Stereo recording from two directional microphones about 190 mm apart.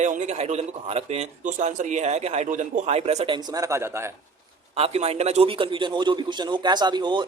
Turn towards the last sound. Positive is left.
turn(degrees=-25)  # may be behind; listen again after turning